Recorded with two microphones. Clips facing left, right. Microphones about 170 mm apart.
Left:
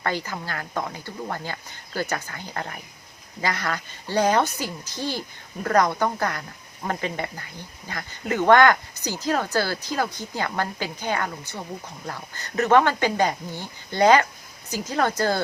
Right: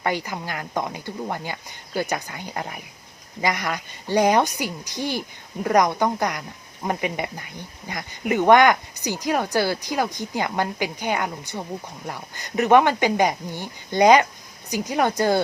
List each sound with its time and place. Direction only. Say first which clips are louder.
0.0 s speech: right 2 dB; 15° right (ahead or behind)